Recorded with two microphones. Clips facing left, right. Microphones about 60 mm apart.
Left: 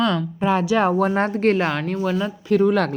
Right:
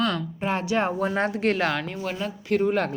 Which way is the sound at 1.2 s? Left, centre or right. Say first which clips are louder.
Left 5 dB; left.